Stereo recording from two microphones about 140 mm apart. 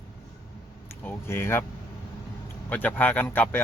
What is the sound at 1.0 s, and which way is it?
Speech, 15° left (ahead or behind).